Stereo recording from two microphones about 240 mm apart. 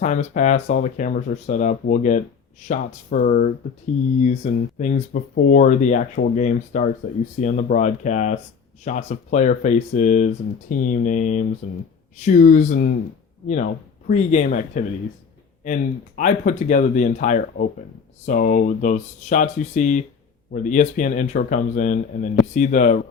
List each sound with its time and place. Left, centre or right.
0.0 s speech: left
14.1 s speech: left